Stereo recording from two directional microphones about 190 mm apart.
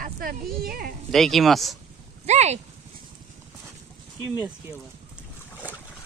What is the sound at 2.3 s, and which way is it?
Speech, 35° right (ahead or behind).